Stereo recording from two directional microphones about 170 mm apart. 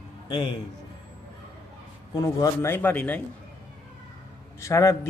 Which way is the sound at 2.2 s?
15° left (ahead or behind).